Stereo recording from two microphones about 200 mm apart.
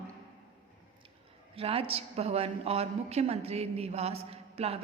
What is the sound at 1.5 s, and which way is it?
A woman's voice, 30° right (ahead or behind).